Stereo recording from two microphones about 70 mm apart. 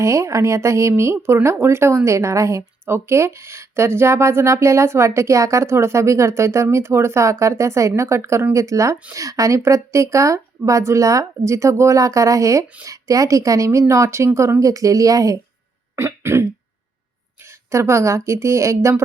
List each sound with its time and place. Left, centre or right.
0.0 s speech: right
16.0 s throat clearing: right
17.4 s speech: right